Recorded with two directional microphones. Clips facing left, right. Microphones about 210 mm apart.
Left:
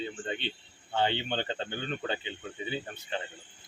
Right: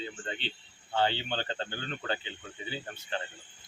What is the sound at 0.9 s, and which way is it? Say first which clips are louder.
Speech: left 1 dB; 20° left (ahead or behind).